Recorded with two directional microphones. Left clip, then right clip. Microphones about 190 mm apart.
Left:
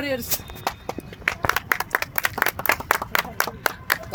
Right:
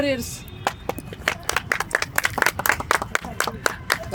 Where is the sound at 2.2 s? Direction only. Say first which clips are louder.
Right 1 dB; 55° left (ahead or behind).